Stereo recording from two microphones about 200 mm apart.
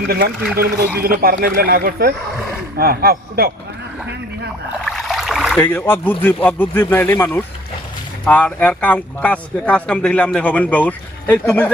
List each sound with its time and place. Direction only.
0.5 s speech: 50° right (ahead or behind)
4.9 s a sound: centre (ahead or behind)
5.5 s speech: 10° left (ahead or behind)